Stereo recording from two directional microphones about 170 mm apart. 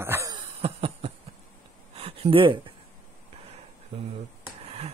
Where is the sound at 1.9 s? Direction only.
35° right (ahead or behind).